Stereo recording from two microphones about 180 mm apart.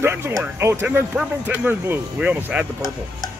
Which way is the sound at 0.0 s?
15° right (ahead or behind).